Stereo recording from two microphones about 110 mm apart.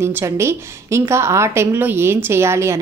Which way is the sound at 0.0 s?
25° right (ahead or behind).